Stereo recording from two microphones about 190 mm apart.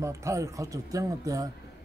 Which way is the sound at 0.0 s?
15° right (ahead or behind).